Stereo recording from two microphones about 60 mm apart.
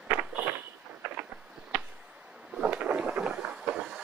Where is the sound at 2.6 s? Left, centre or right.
Right.